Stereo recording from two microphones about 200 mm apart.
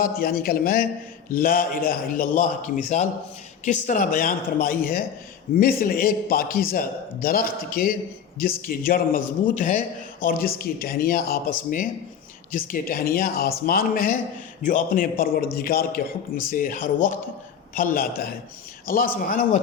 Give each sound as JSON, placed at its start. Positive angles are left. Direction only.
{"t": 0.2, "sound": "a man's voice", "side_deg": 50}